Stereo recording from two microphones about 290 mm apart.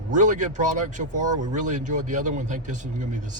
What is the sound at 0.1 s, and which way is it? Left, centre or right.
Speech, right.